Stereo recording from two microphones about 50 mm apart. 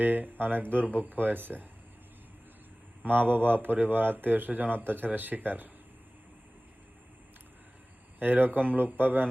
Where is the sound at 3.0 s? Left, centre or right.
Right.